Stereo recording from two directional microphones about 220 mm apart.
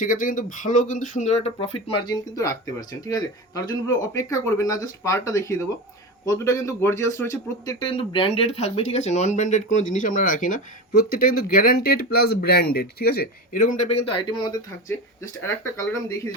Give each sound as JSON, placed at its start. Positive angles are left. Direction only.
{"t": 0.0, "sound": "speech", "side_deg": 35}